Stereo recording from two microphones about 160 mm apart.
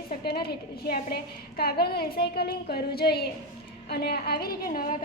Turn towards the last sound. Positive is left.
turn(degrees=65)  # may be behind; listen again after turning